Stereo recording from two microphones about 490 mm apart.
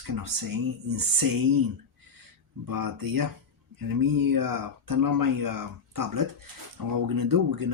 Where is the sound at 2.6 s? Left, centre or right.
Right.